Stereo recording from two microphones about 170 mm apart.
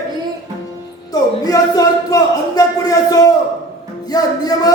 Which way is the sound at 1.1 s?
20° left (ahead or behind).